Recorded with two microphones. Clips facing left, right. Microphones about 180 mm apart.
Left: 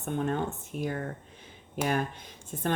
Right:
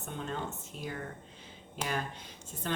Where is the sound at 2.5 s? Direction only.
50° left (ahead or behind).